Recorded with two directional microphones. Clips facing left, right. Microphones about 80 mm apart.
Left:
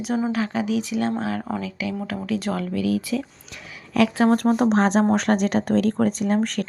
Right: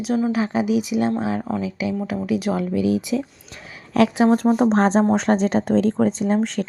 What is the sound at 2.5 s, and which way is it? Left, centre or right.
Speech, centre.